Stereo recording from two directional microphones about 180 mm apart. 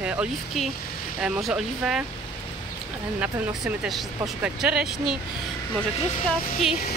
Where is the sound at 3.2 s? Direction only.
5° right (ahead or behind).